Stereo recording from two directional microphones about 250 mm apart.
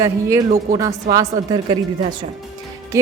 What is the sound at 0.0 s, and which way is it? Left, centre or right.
Speech, centre.